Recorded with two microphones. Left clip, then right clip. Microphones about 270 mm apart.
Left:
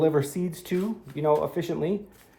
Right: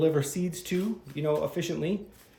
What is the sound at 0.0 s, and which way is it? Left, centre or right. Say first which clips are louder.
A man's voice: left 3 dB; centre.